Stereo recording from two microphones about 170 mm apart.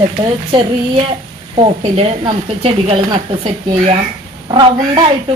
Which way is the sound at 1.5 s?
30° right (ahead or behind).